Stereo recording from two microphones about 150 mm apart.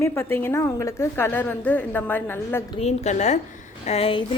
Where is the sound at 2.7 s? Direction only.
45° left (ahead or behind).